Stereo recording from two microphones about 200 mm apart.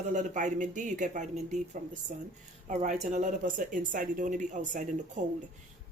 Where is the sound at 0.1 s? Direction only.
40° right (ahead or behind).